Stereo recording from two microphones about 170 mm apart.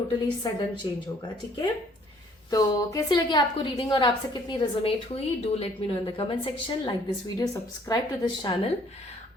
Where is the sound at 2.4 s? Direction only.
20° left (ahead or behind).